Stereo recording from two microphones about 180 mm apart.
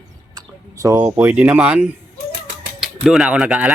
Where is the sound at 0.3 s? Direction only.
20° right (ahead or behind).